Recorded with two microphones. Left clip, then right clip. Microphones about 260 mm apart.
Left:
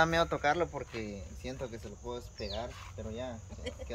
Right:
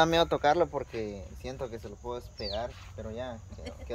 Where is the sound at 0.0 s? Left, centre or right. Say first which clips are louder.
Right 4 dB; right.